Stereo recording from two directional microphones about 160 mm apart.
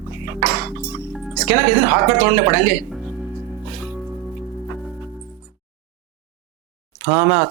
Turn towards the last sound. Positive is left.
turn(degrees=-15)  # may be behind; listen again after turning